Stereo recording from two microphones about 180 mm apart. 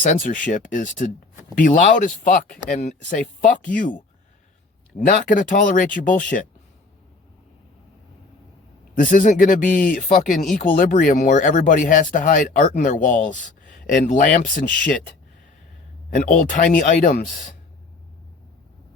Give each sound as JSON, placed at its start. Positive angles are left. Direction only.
{"t": 0.0, "sound": "speech", "side_deg": 45}
{"t": 9.0, "sound": "speech", "side_deg": 50}
{"t": 16.0, "sound": "a man's voice", "side_deg": 50}